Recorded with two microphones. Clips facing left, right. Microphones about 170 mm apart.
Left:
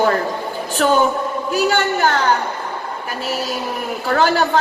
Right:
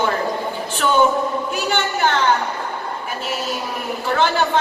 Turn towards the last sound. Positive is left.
turn(degrees=40)  # may be behind; listen again after turning